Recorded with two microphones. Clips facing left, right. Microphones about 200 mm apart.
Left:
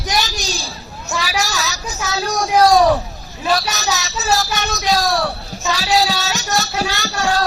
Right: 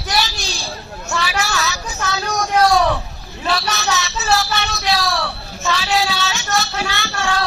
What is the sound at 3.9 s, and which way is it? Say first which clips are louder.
Child singing: even; 40° left (ahead or behind).